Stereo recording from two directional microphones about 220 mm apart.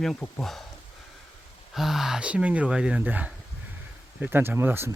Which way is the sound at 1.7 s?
Centre (ahead or behind).